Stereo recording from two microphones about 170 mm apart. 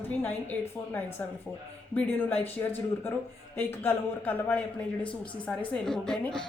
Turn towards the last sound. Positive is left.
turn(degrees=5)  # may be behind; listen again after turning